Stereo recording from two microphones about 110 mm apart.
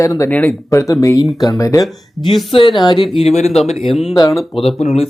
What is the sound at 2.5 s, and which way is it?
Speech, 50° left (ahead or behind).